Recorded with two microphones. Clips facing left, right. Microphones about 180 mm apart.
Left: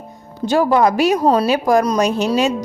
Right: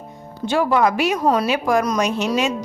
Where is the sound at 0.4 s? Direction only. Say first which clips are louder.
Left 3 dB; 40° left (ahead or behind).